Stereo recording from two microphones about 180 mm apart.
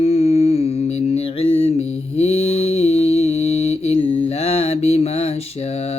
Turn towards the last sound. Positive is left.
turn(degrees=35)  # may be behind; listen again after turning